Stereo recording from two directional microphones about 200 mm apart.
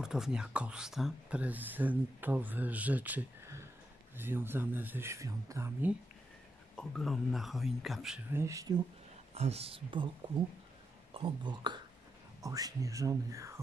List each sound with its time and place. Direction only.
0.0 s speech: 5° right (ahead or behind)
6.8 s speech: 5° left (ahead or behind); by 8.8 s 20° right (ahead or behind)
9.3 s speech: 30° right (ahead or behind)
11.1 s speech: 25° right (ahead or behind)